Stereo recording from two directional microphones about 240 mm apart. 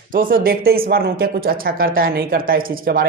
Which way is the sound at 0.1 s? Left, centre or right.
Right.